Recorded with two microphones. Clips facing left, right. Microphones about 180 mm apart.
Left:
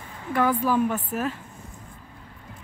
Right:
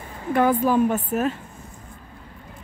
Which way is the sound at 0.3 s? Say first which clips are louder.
Right 4 dB; 25° right (ahead or behind).